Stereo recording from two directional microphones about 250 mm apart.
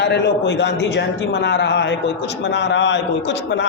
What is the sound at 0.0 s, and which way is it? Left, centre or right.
A man's voice, left.